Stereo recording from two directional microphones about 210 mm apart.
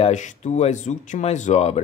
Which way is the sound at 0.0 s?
35° left (ahead or behind).